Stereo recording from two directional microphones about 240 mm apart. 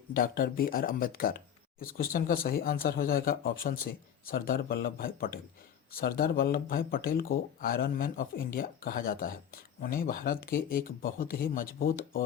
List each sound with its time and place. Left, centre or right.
0.1 s speech: left